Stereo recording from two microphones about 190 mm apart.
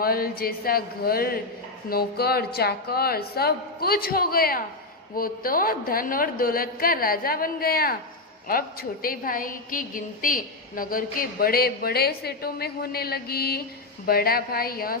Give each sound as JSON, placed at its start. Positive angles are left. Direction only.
{"t": 0.0, "sound": "a woman's voice", "side_deg": 50}